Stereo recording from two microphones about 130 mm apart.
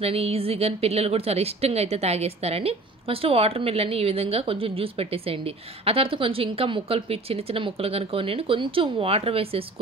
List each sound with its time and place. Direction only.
0.0 s a woman's voice: 50° right (ahead or behind)